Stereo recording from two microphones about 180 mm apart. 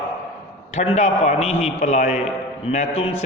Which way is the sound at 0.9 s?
40° left (ahead or behind).